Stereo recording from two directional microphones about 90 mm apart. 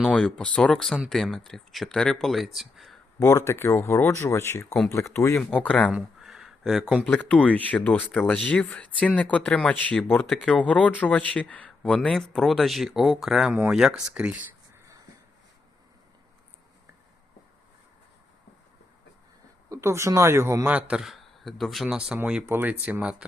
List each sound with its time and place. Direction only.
0.1 s speech: 10° left (ahead or behind)
3.2 s speech: 30° left (ahead or behind)
5.4 s speech: 15° left (ahead or behind)
5.9 s a sound: 5° right (ahead or behind)
7.0 s speech: 20° left (ahead or behind)
10.2 s speech: centre (ahead or behind)
10.5 s speech: 15° left (ahead or behind); by 14.3 s 15° right (ahead or behind)
19.7 s speech: 35° right (ahead or behind)
20.7 s speech: 15° right (ahead or behind)
21.0 s speech: centre (ahead or behind)
22.4 s speech: 20° right (ahead or behind)